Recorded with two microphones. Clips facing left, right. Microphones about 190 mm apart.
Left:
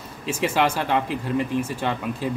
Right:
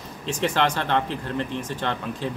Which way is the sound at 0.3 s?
5° left (ahead or behind).